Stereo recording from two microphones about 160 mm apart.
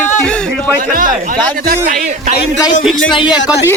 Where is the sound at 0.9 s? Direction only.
60° right (ahead or behind).